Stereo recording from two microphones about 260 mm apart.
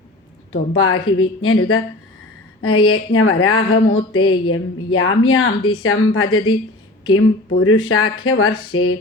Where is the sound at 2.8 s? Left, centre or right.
Left.